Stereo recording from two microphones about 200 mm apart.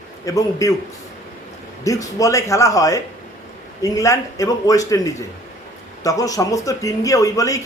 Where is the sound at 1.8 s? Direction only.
15° left (ahead or behind).